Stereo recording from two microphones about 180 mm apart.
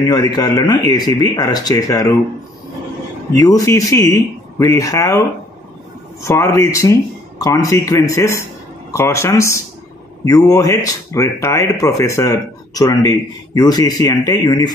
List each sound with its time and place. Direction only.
0.0 s speech: 20° left (ahead or behind)
3.3 s speech: 20° left (ahead or behind)
6.2 s speech: 15° left (ahead or behind)